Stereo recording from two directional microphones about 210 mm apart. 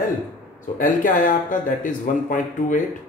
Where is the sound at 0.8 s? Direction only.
40° left (ahead or behind).